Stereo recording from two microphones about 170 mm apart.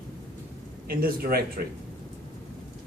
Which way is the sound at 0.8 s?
60° right (ahead or behind).